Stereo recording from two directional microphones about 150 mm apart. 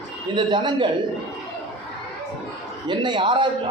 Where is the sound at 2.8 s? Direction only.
30° right (ahead or behind).